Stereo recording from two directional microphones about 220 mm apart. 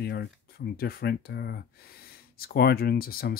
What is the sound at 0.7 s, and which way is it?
Speech, 45° left (ahead or behind).